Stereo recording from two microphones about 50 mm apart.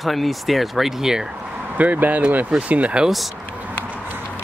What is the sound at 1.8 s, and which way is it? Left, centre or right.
Speech, right.